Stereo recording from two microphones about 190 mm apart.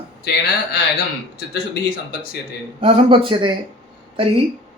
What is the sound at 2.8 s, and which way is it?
Speech, 30° right (ahead or behind).